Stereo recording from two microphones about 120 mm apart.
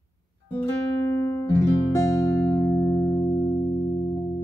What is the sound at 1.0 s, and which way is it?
Music, 25° left (ahead or behind).